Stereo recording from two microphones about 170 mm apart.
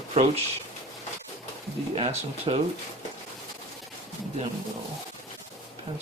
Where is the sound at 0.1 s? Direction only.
35° right (ahead or behind).